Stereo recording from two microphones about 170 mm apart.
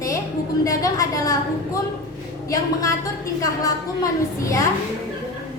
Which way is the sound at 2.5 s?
20° left (ahead or behind).